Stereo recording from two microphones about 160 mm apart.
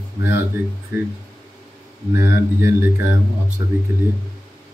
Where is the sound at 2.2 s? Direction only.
15° right (ahead or behind).